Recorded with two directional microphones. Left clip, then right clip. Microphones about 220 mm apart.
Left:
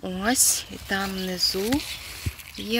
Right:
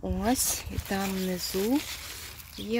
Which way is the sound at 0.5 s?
10° right (ahead or behind).